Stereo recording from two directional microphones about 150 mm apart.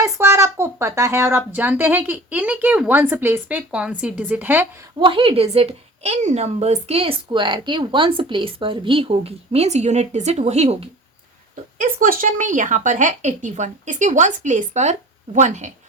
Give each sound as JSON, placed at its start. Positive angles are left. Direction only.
{"t": 0.0, "sound": "a woman's voice", "side_deg": -20}
{"t": 4.9, "sound": "a woman's voice", "side_deg": -35}
{"t": 11.8, "sound": "speech", "side_deg": -70}